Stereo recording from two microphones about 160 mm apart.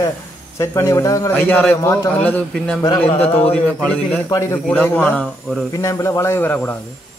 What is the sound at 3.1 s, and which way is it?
Speech, 40° left (ahead or behind).